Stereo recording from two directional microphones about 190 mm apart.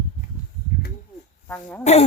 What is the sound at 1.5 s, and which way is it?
Speech, 5° left (ahead or behind).